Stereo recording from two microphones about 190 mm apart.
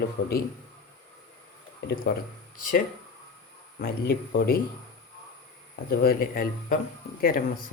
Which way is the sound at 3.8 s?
55° left (ahead or behind).